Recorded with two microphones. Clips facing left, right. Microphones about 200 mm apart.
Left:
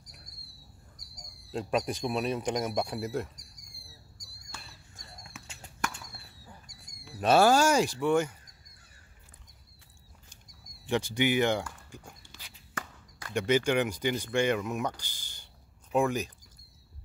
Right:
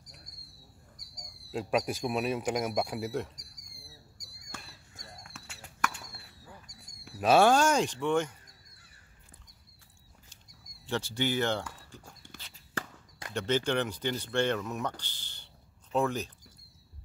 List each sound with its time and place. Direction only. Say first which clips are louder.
1.1 s speech: even; 5° right (ahead or behind)
4.5 s fireworks: right 2 dB; 50° right (ahead or behind)
7.2 s speech: even; centre (ahead or behind)
10.9 s speech: left 4 dB; 15° left (ahead or behind)
12.3 s a sound: right 3 dB; 55° right (ahead or behind)
13.3 s speech: left 3 dB; 10° left (ahead or behind)